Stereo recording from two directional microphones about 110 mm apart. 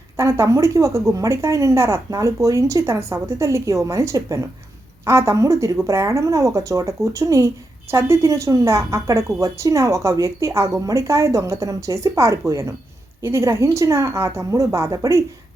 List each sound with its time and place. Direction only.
0.2 s speech: 25° right (ahead or behind)